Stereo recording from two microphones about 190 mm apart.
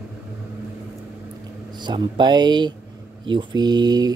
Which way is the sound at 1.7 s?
25° right (ahead or behind).